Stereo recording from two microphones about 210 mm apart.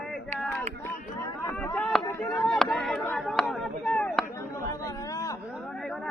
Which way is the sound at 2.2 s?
5° left (ahead or behind).